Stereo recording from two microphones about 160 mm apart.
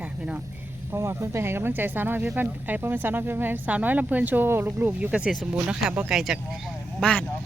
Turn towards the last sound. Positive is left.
turn(degrees=5)  # may be behind; listen again after turning